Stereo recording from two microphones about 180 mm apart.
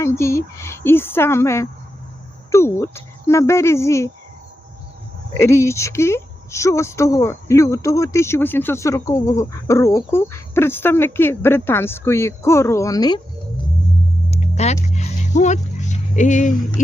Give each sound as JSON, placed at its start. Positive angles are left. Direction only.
{"t": 0.0, "sound": "a woman's voice", "side_deg": 15}
{"t": 5.4, "sound": "a woman's voice", "side_deg": 15}
{"t": 14.3, "sound": "vehicle", "side_deg": 35}